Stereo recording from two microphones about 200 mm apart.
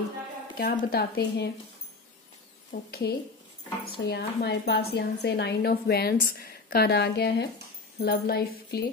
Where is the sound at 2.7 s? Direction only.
45° left (ahead or behind).